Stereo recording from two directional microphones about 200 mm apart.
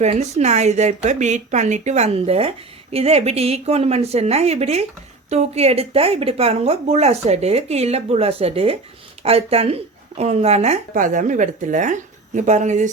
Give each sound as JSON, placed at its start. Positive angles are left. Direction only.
{"t": 0.0, "sound": "speech", "side_deg": -35}